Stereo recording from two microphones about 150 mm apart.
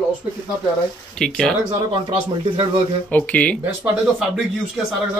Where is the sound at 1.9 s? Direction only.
35° right (ahead or behind).